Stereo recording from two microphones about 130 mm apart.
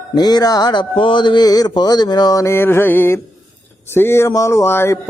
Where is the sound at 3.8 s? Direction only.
20° left (ahead or behind).